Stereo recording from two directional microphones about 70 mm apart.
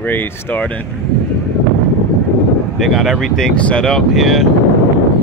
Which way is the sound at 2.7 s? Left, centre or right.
Centre.